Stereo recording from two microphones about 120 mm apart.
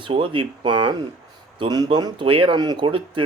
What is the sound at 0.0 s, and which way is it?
Speech, 45° right (ahead or behind).